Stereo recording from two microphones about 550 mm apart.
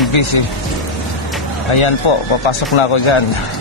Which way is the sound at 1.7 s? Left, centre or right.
Left.